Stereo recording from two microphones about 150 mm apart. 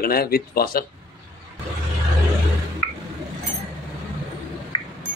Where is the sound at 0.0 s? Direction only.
85° left.